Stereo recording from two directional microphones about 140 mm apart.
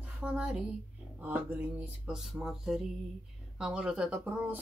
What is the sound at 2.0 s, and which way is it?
Speech, 5° right (ahead or behind).